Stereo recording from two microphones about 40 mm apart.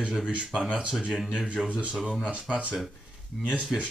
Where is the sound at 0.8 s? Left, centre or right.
Right.